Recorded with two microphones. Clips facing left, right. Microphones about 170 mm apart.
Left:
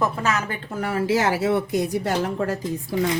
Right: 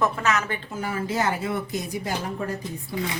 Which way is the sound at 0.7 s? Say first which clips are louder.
Left 8 dB; 65° left (ahead or behind).